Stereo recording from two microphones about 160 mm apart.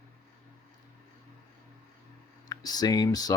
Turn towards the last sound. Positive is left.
turn(degrees=25)  # may be behind; listen again after turning